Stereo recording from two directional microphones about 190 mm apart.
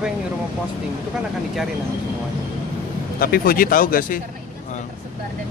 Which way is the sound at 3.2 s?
50° left (ahead or behind).